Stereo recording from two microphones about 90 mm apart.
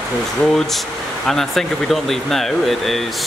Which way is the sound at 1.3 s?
5° left (ahead or behind).